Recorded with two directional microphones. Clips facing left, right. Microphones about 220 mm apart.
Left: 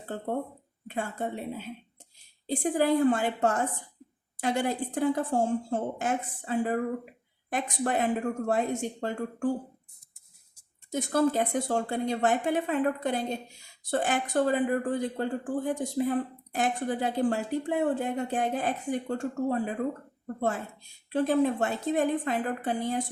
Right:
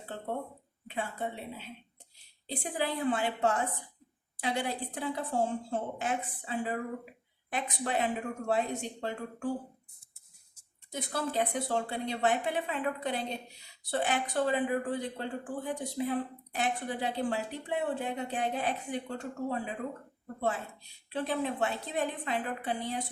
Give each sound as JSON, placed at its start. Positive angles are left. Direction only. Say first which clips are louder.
{"t": 0.9, "sound": "speech", "louder": "left 4 dB", "side_deg": 45}
{"t": 10.9, "sound": "speech", "louder": "left 7 dB", "side_deg": 45}